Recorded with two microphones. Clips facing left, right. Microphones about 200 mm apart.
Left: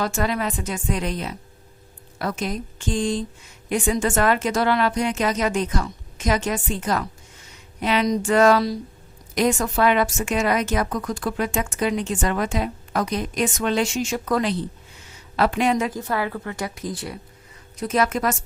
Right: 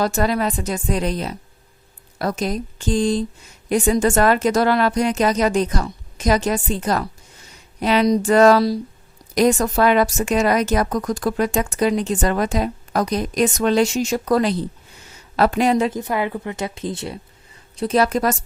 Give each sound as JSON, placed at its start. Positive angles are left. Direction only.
{"t": 0.0, "sound": "a woman's voice", "side_deg": -40}
{"t": 16.0, "sound": "a woman's voice", "side_deg": -20}